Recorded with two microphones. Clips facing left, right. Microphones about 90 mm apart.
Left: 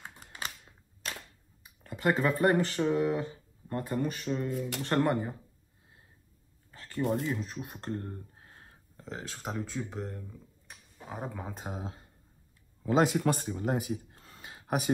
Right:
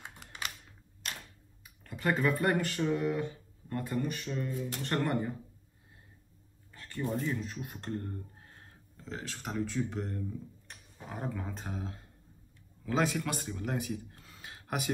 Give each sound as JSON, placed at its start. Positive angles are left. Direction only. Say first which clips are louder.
{"t": 0.0, "sound": "typing", "louder": "left 1 dB", "side_deg": 40}
{"t": 1.9, "sound": "speech", "louder": "left 2 dB", "side_deg": 30}
{"t": 4.5, "sound": "speech", "louder": "left 3 dB", "side_deg": 75}
{"t": 4.8, "sound": "speech", "louder": "left 4 dB", "side_deg": 20}
{"t": 6.7, "sound": "a sound", "louder": "left 1 dB", "side_deg": 25}
{"t": 7.3, "sound": "speech", "louder": "left 1 dB", "side_deg": 25}
{"t": 9.0, "sound": "speech", "louder": "left 1 dB", "side_deg": 10}
{"t": 12.8, "sound": "speech", "louder": "left 5 dB", "side_deg": 35}
{"t": 13.7, "sound": "a sound", "louder": "left 5 dB", "side_deg": 35}
{"t": 14.4, "sound": "a sound", "louder": "left 5 dB", "side_deg": 25}